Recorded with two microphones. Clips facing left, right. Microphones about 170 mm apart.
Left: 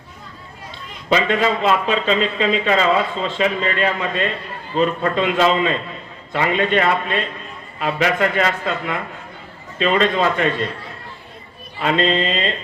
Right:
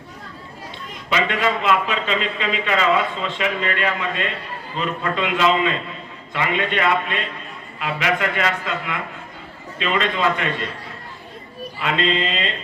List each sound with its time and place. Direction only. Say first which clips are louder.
1.1 s speech: left 4 dB; 35° left (ahead or behind)
11.8 s speech: left 4 dB; 40° left (ahead or behind)